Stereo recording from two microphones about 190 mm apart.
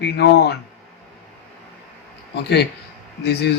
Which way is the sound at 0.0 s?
60° left (ahead or behind).